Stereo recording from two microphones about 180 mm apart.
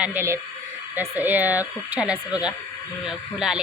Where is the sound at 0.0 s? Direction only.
10° right (ahead or behind).